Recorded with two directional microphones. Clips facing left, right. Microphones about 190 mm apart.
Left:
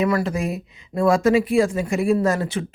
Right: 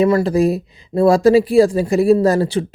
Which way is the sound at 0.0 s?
30° right (ahead or behind).